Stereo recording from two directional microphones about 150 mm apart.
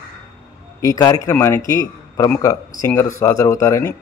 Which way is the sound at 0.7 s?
25° left (ahead or behind).